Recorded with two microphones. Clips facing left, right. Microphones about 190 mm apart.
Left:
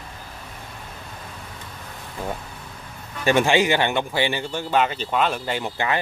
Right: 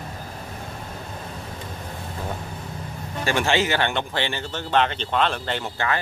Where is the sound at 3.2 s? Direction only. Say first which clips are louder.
Left 4 dB; 15° left (ahead or behind).